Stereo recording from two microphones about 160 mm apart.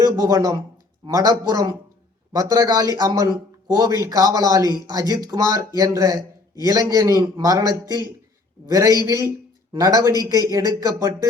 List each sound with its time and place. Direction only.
0.0 s speech: 25° right (ahead or behind)